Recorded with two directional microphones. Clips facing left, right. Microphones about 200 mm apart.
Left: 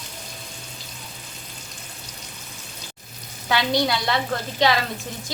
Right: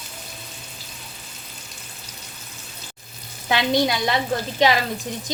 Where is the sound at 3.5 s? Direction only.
20° right (ahead or behind).